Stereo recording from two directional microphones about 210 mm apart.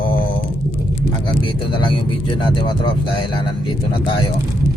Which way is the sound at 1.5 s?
25° left (ahead or behind).